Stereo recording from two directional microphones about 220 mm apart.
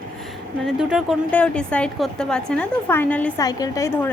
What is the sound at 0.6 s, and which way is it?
A woman's voice, centre (ahead or behind).